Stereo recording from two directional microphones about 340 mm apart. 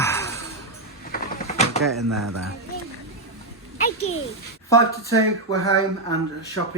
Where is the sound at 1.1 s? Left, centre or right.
Left.